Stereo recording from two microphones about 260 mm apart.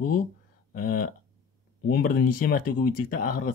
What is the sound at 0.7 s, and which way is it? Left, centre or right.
Speech, left.